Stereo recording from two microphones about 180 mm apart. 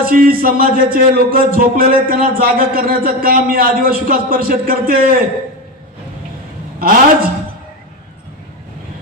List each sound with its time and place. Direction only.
0.0 s speech: 50° right (ahead or behind)
6.7 s a man's voice: 55° right (ahead or behind)